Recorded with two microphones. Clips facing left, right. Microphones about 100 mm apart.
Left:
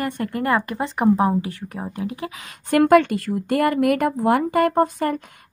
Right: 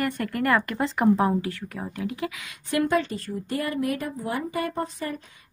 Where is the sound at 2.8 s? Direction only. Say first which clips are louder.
Left 10 dB; 75° left (ahead or behind).